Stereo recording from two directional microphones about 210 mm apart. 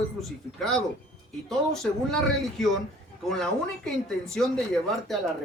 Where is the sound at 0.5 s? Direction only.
Centre (ahead or behind).